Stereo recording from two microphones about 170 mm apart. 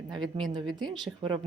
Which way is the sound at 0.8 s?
25° right (ahead or behind).